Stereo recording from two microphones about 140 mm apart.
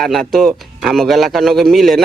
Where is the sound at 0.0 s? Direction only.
Centre (ahead or behind).